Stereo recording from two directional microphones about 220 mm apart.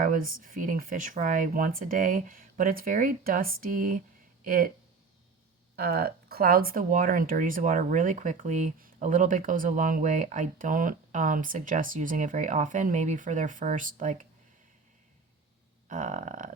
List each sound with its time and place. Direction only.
0.0 s speech: 40° right (ahead or behind)
5.7 s speech: 45° right (ahead or behind)
15.9 s speech: 35° right (ahead or behind)